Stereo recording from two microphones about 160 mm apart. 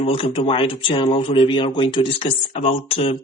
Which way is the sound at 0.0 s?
35° left (ahead or behind).